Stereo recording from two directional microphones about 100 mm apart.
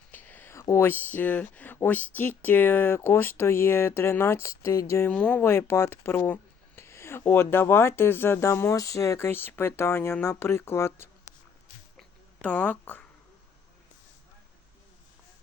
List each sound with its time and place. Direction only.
0.1 s a sound: 15° left (ahead or behind)
0.7 s speech: 20° left (ahead or behind)
5.1 s speech: 10° left (ahead or behind)
5.4 s speech: 25° left (ahead or behind)
12.4 s speech: 15° left (ahead or behind)